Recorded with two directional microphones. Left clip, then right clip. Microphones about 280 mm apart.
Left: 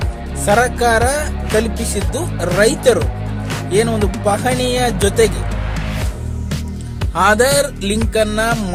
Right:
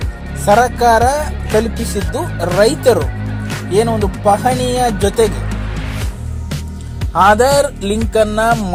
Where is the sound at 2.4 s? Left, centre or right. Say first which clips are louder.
Right 2 dB; centre.